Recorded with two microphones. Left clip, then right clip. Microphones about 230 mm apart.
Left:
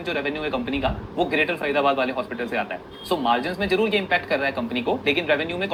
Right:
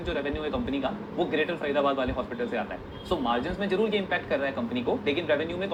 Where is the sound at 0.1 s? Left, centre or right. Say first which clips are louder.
Left 5 dB; left.